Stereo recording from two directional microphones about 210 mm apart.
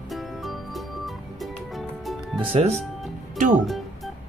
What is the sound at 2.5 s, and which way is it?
Speech, 30° right (ahead or behind).